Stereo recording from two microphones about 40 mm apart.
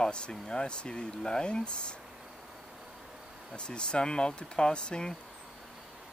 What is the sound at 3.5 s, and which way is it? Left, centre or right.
Speech, left.